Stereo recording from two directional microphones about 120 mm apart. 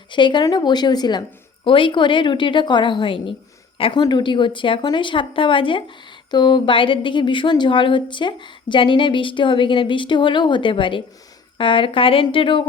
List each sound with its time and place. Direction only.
0.1 s a woman's voice: 40° left (ahead or behind)
4.0 s a woman's voice: 40° left (ahead or behind)